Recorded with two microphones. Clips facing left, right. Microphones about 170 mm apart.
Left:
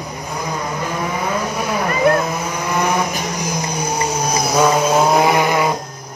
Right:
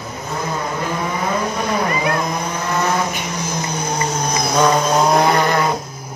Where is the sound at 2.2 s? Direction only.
10° left (ahead or behind).